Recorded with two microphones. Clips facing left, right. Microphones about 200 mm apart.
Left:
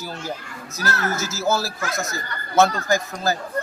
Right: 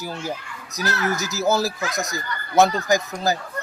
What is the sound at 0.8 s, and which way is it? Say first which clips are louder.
Speech: right 1 dB; 40° left (ahead or behind).